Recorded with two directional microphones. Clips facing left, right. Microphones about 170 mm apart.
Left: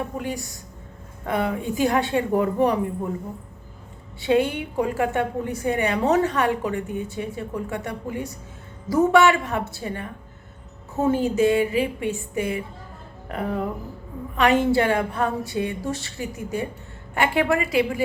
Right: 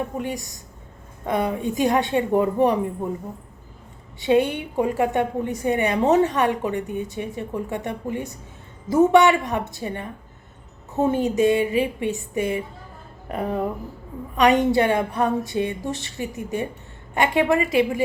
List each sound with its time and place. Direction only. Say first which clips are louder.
0.2 s a woman's voice: right 1 dB; 20° right (ahead or behind)
4.2 s a woman's voice: right 1 dB; 20° right (ahead or behind)